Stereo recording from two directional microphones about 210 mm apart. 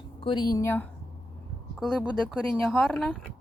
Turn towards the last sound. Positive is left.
turn(degrees=0)  # may be behind; listen again after turning